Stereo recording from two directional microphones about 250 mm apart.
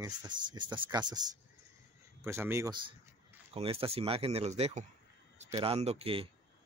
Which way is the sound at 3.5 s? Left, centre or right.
Right.